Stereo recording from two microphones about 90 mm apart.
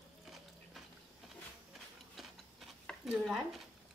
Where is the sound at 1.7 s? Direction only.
Centre (ahead or behind).